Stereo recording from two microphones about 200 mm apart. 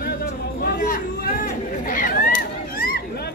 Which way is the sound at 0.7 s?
45° left (ahead or behind).